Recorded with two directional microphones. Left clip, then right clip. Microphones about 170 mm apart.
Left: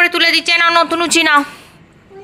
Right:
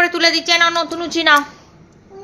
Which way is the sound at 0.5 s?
20° left (ahead or behind).